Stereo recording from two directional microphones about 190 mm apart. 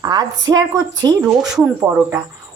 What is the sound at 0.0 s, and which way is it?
A woman's voice, 20° right (ahead or behind).